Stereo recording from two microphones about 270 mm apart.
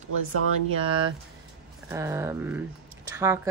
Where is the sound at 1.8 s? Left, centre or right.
Centre.